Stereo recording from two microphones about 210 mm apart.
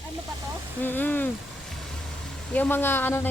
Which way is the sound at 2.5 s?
10° left (ahead or behind).